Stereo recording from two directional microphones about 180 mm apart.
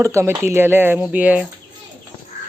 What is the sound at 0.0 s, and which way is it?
Speech, 15° right (ahead or behind).